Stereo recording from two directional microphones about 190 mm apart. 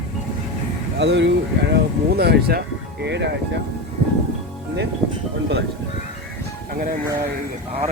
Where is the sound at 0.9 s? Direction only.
65° right (ahead or behind).